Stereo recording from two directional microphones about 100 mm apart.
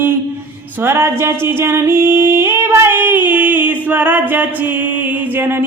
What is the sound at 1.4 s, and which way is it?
Female singing, 25° right (ahead or behind).